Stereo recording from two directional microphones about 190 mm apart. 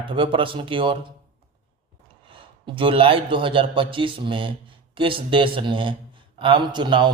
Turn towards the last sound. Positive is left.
turn(degrees=-25)  # may be behind; listen again after turning